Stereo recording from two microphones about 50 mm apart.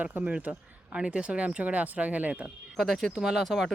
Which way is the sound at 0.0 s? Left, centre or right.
Right.